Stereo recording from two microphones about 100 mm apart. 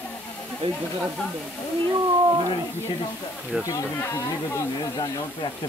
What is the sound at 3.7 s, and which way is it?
Speech, 35° left (ahead or behind).